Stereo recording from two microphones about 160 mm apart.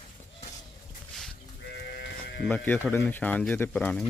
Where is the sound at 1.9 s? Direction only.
90° left.